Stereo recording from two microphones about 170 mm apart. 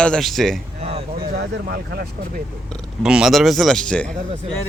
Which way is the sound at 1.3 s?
75° right (ahead or behind).